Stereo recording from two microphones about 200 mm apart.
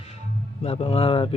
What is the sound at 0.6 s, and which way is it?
Speech, 30° left (ahead or behind).